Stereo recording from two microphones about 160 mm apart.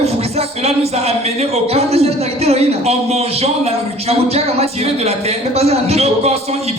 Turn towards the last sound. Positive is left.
turn(degrees=-40)  # may be behind; listen again after turning